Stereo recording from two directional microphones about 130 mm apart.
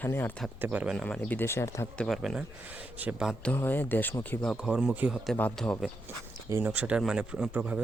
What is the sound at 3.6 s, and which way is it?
Speech, 15° left (ahead or behind).